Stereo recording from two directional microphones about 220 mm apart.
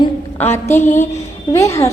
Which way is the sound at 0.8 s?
35° left (ahead or behind).